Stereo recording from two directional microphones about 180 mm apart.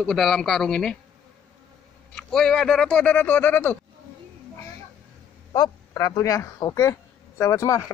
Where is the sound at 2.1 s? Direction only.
5° left (ahead or behind).